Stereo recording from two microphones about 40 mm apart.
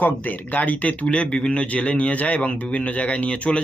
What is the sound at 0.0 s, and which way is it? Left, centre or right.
A man's voice, left.